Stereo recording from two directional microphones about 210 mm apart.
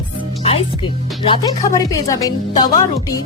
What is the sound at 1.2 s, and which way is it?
Speech, 25° left (ahead or behind).